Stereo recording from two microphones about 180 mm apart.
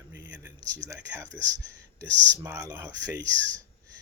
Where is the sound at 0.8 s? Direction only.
15° right (ahead or behind).